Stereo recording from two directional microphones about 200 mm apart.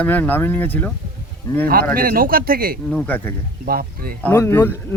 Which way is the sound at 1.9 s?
45° right (ahead or behind).